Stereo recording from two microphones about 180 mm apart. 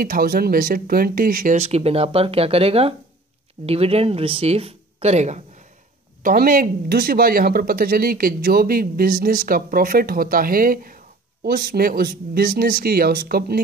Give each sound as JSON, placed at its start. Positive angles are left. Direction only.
{"t": 0.0, "sound": "speech", "side_deg": -55}
{"t": 6.2, "sound": "speech", "side_deg": -55}